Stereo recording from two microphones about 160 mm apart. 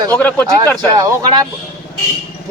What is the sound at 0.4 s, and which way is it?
Speech, 20° right (ahead or behind).